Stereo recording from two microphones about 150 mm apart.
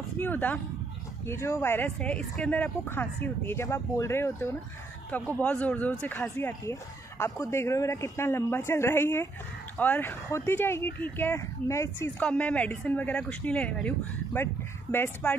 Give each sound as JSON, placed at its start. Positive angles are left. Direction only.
{"t": 0.2, "sound": "a sound", "side_deg": 10}
{"t": 1.2, "sound": "speech", "side_deg": 15}
{"t": 12.2, "sound": "speech", "side_deg": 5}